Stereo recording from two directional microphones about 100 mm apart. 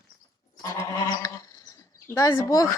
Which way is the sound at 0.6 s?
30° left (ahead or behind).